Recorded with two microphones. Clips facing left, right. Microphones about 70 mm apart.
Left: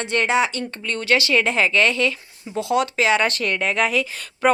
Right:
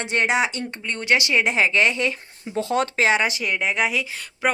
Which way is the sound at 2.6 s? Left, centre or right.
Right.